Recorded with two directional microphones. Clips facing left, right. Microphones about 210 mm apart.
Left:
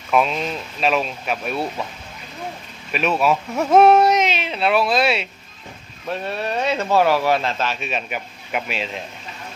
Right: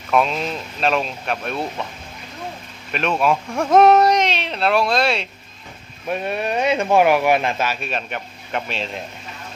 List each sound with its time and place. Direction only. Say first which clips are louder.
0.1 s speech: even; centre (ahead or behind)
2.9 s speech: even; 5° left (ahead or behind)
6.1 s speech: right 2 dB; 15° right (ahead or behind)
7.8 s speech: even; centre (ahead or behind)